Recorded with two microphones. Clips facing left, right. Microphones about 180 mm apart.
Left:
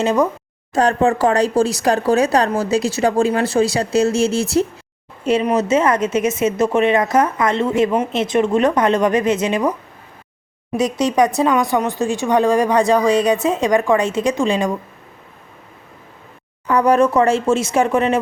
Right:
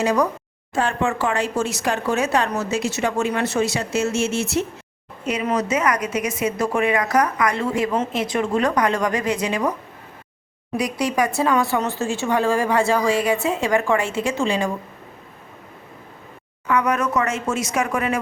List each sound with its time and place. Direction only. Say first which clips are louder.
0.0 s speech: left 3 dB; 25° left (ahead or behind)
0.7 s speech: left 6 dB; 40° left (ahead or behind); by 14.7 s 20° left (ahead or behind)
16.6 s speech: left 7 dB; 35° left (ahead or behind)